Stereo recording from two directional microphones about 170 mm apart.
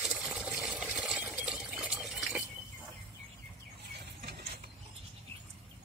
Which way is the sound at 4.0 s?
70° right (ahead or behind).